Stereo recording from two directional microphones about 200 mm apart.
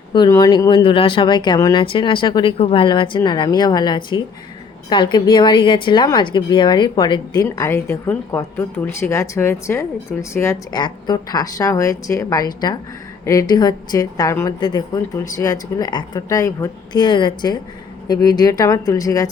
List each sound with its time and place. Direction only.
0.1 s speech: 20° left (ahead or behind)